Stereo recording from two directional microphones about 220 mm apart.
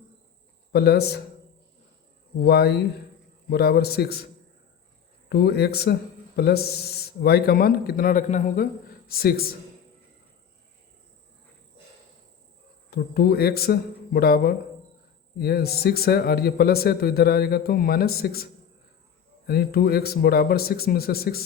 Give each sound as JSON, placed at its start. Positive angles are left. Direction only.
{"t": 0.7, "sound": "speech", "side_deg": 45}
{"t": 2.4, "sound": "speech", "side_deg": 45}
{"t": 5.3, "sound": "speech", "side_deg": 45}
{"t": 12.9, "sound": "speech", "side_deg": 45}
{"t": 19.5, "sound": "speech", "side_deg": 45}